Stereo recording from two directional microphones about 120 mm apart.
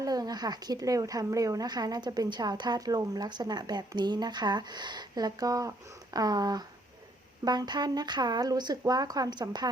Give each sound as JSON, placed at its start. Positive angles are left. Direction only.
{"t": 0.0, "sound": "speech", "side_deg": -35}